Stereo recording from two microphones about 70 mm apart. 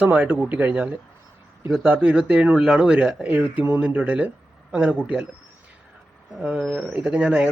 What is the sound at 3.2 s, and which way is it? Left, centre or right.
A man's voice, right.